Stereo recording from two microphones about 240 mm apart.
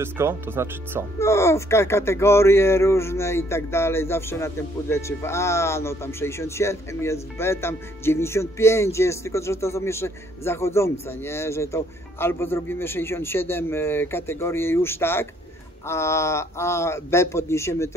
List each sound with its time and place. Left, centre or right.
0.0 s speech: centre
1.2 s speech: centre